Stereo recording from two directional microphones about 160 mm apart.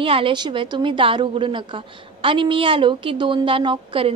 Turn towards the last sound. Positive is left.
turn(degrees=-30)  # may be behind; listen again after turning